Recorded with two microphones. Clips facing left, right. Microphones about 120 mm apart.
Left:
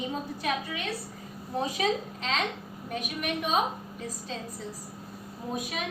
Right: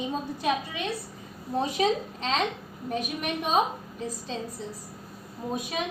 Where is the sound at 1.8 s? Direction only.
30° right (ahead or behind).